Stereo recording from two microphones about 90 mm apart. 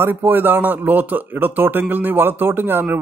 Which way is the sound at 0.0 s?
20° right (ahead or behind).